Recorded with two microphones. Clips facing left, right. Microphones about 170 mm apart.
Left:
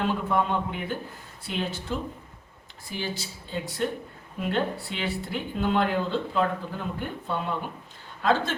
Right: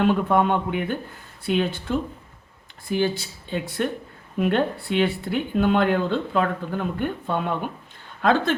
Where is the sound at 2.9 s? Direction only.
60° right (ahead or behind).